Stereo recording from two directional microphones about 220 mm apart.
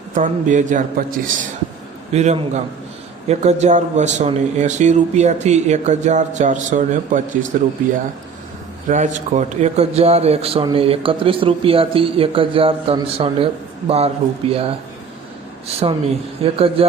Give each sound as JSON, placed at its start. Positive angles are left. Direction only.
{"t": 0.1, "sound": "speech", "side_deg": -35}
{"t": 8.9, "sound": "a man's voice", "side_deg": -30}